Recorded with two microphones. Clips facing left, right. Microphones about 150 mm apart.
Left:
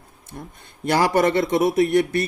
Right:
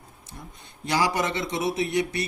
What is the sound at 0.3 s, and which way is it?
Speech, 55° left (ahead or behind).